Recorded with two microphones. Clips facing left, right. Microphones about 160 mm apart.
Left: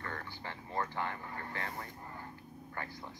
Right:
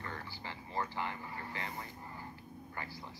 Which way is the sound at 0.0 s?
55° left (ahead or behind).